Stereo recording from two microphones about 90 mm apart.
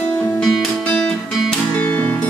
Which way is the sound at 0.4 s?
10° left (ahead or behind).